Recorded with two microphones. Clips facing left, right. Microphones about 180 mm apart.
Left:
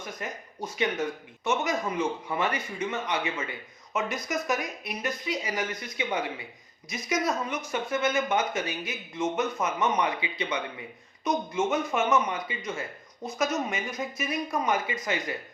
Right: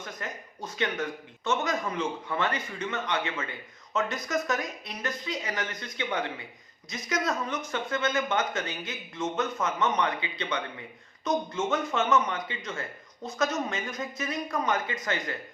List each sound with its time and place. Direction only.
0.0 s speech: 20° left (ahead or behind)